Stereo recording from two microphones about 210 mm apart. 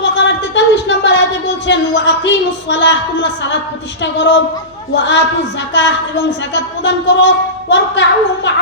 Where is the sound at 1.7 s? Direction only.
55° left (ahead or behind).